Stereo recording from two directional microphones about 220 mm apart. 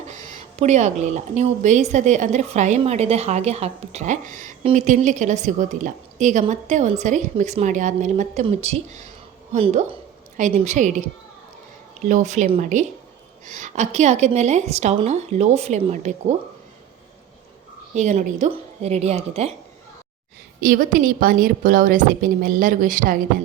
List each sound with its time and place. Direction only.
0.1 s a woman's voice: 35° right (ahead or behind)
12.0 s speech: 35° right (ahead or behind)
17.9 s speech: 35° right (ahead or behind)
20.6 s speech: 40° right (ahead or behind)